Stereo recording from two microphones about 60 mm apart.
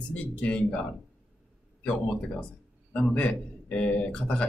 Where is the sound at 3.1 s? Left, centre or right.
Left.